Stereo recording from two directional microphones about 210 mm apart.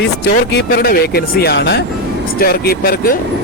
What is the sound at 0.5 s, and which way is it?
Speech, 50° left (ahead or behind).